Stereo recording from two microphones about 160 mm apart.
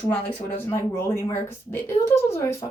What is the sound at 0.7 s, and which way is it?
Speech, 15° left (ahead or behind).